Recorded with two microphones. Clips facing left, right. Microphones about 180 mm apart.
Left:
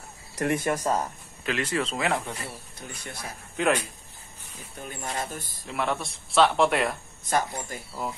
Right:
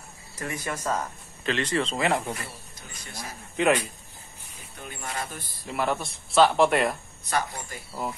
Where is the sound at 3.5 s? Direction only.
Centre (ahead or behind).